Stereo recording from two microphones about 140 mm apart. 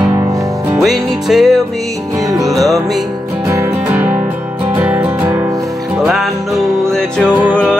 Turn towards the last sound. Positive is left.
turn(degrees=-10)  # may be behind; listen again after turning